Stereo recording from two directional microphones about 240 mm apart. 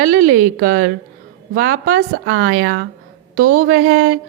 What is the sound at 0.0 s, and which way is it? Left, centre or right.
Speech, right.